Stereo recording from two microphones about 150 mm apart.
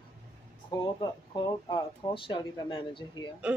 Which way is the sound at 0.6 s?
30° left (ahead or behind).